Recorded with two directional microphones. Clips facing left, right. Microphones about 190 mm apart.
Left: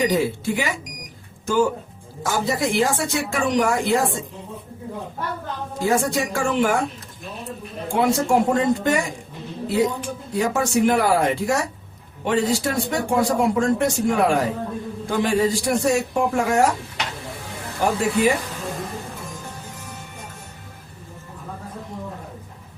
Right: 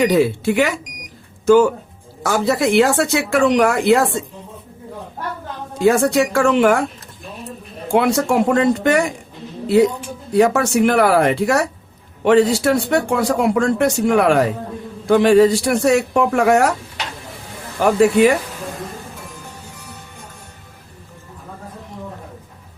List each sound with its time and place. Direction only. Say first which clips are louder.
0.0 s speech: right 6 dB; 70° right (ahead or behind)
2.2 s speech: right 5 dB; 70° right (ahead or behind)
5.8 s speech: right 7 dB; 70° right (ahead or behind)
7.9 s speech: right 3 dB; 70° right (ahead or behind)
10.3 s speech: right 6 dB; 70° right (ahead or behind)
17.8 s speech: right 7 dB; 70° right (ahead or behind)